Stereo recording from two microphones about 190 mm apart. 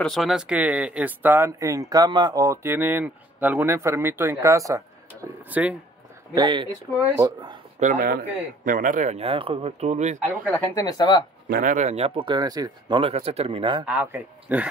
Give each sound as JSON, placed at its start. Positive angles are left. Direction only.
{"t": 0.0, "sound": "speech", "side_deg": 0}
{"t": 6.3, "sound": "speech", "side_deg": -25}
{"t": 7.8, "sound": "speech", "side_deg": -45}
{"t": 10.4, "sound": "speech", "side_deg": 10}
{"t": 11.4, "sound": "speech", "side_deg": -45}
{"t": 13.8, "sound": "speech", "side_deg": -5}